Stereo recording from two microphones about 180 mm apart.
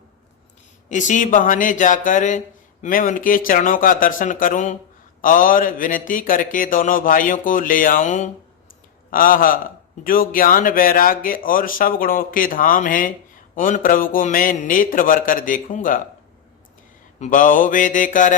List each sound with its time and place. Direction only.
0.9 s a man's voice: 45° left (ahead or behind)
17.2 s a man's voice: 45° left (ahead or behind)